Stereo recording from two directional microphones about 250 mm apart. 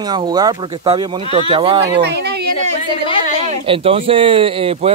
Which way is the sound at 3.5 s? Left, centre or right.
Right.